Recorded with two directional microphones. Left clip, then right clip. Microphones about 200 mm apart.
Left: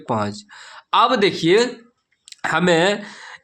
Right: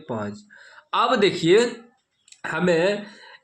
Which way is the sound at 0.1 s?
40° left (ahead or behind).